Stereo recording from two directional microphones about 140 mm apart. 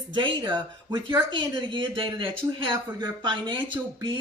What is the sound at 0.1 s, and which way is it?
Speech, 35° right (ahead or behind).